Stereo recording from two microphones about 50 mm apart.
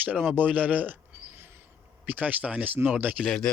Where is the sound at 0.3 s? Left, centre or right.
Right.